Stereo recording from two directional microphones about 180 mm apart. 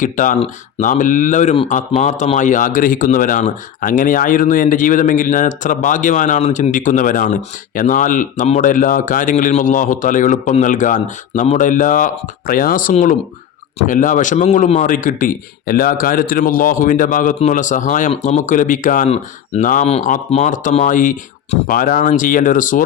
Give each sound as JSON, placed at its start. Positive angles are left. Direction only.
{"t": 0.0, "sound": "a man's voice", "side_deg": 45}